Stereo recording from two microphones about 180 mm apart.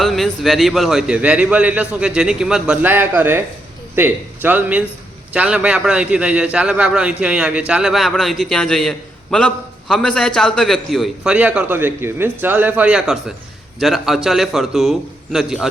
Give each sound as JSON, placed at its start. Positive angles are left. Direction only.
{"t": 0.0, "sound": "a man's voice", "side_deg": 0}